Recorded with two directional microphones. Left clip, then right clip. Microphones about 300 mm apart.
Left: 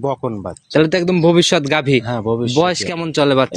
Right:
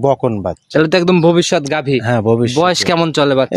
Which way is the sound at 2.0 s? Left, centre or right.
Right.